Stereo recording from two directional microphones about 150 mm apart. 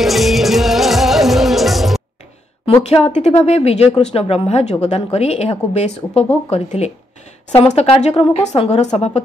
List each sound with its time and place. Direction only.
0.0 s music: centre (ahead or behind)
2.6 s speech: 45° left (ahead or behind)